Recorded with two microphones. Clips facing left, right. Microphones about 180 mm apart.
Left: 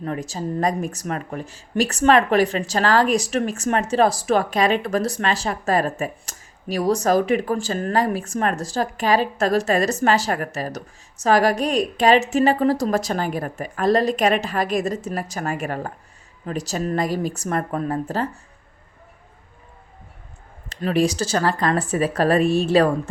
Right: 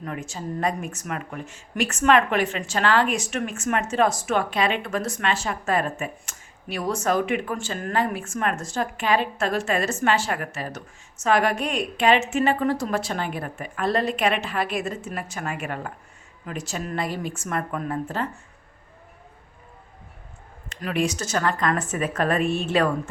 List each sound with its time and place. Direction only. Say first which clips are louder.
0.0 s speech: left 5 dB; 35° left (ahead or behind)
20.7 s speech: left 5 dB; 35° left (ahead or behind)